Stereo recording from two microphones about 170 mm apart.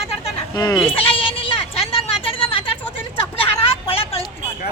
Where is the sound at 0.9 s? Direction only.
30° left (ahead or behind).